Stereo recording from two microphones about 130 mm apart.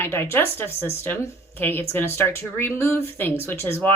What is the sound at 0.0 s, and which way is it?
A woman's voice, 20° left (ahead or behind).